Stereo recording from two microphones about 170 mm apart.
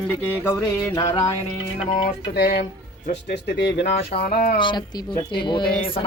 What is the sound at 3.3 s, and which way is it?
Speech, 85° left.